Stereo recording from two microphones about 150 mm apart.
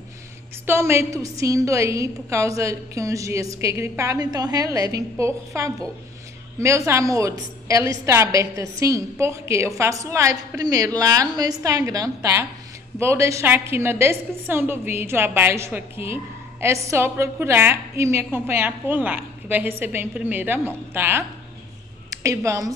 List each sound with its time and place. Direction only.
0.7 s a woman's voice: 15° right (ahead or behind)